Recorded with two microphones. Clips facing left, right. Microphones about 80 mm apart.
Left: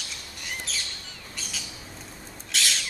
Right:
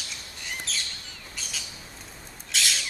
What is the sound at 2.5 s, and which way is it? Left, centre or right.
Owl, centre.